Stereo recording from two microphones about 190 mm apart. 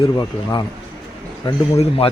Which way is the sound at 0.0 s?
25° left (ahead or behind).